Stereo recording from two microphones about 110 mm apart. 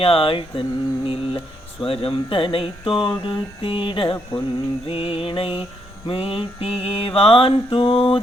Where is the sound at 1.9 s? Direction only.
55° left (ahead or behind).